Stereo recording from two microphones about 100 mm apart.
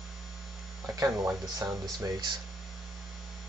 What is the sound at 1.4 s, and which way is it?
Speech, 35° right (ahead or behind).